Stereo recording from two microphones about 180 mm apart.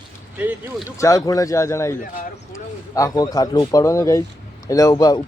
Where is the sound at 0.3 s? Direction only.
10° right (ahead or behind).